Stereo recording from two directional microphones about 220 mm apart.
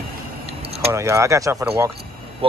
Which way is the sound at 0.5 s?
25° right (ahead or behind).